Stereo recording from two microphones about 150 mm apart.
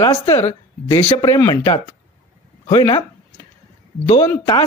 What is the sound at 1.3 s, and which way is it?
Speech, 20° left (ahead or behind).